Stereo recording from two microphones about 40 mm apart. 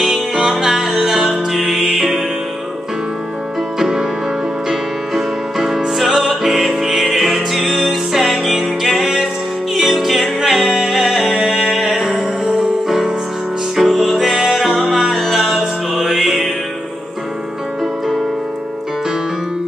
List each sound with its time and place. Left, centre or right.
0.0 s music: centre
3.8 s music: centre